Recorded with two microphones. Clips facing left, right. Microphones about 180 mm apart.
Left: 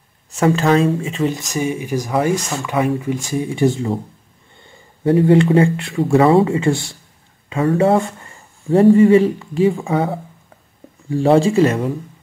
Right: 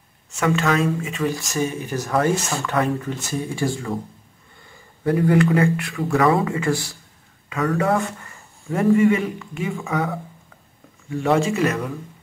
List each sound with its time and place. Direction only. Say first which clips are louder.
0.3 s speech: left 6 dB; 35° left (ahead or behind)
5.0 s speech: left 5 dB; 25° left (ahead or behind)